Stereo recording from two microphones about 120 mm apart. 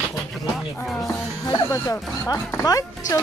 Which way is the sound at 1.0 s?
25° left (ahead or behind).